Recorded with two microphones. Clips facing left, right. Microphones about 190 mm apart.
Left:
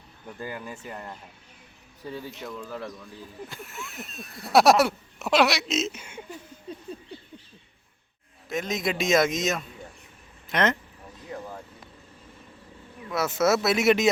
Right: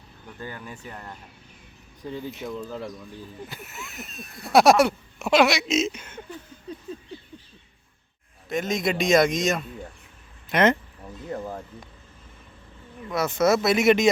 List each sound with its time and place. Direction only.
0.3 s speech: 10° left (ahead or behind)
2.5 s speech: 20° right (ahead or behind)
3.5 s speech: centre (ahead or behind)
8.4 s speech: centre (ahead or behind)
10.5 s speech: 10° right (ahead or behind)
13.1 s speech: 5° left (ahead or behind)